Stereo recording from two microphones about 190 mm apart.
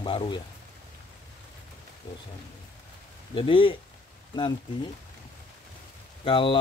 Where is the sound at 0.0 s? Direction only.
25° left (ahead or behind).